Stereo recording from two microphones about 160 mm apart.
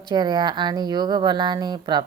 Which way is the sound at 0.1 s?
25° right (ahead or behind).